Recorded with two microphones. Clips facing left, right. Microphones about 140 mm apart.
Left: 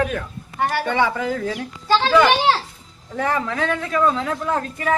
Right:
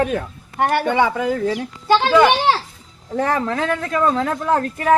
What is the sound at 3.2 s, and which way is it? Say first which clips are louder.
A man's voice: right 2 dB; 40° right (ahead or behind).